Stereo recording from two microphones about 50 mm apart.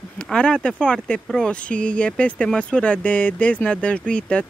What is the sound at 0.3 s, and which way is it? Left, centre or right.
Speech, centre.